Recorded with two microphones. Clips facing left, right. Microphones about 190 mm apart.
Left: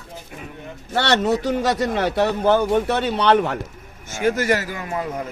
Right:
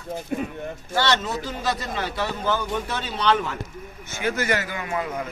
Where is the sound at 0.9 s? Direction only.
65° left (ahead or behind).